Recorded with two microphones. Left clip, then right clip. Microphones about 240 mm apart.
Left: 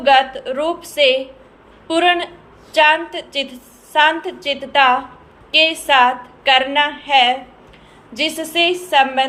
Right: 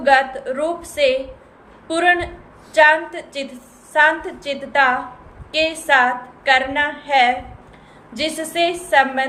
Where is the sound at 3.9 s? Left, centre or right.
Centre.